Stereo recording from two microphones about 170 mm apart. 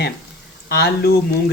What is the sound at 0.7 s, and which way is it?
Speech, 70° left (ahead or behind).